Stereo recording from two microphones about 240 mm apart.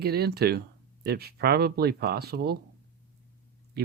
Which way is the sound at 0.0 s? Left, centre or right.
Right.